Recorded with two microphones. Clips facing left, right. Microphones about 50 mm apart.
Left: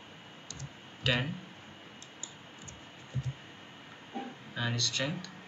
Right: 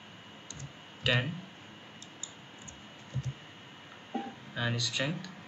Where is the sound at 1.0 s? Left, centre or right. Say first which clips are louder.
Right 1 dB; centre.